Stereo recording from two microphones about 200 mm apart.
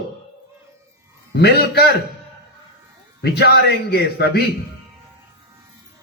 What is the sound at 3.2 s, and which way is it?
A man's voice, 55° left (ahead or behind).